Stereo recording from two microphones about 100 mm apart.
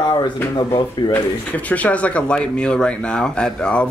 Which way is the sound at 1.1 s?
15° left (ahead or behind).